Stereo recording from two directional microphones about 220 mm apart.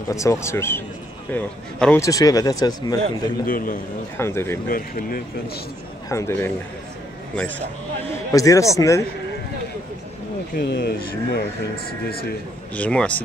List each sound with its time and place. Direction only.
0.1 s speech: 15° left (ahead or behind)
3.4 s speech: 40° left (ahead or behind)
4.2 s speech: 10° left (ahead or behind)
4.6 s speech: 40° left (ahead or behind)
6.0 s a man's voice: 15° left (ahead or behind)
10.5 s speech: 45° left (ahead or behind)
12.7 s speech: 5° left (ahead or behind)